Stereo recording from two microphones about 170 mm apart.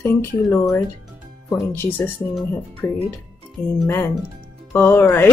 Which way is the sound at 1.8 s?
10° left (ahead or behind).